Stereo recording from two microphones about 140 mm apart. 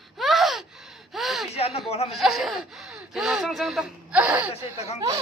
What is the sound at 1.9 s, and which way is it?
Speech, 45° left (ahead or behind).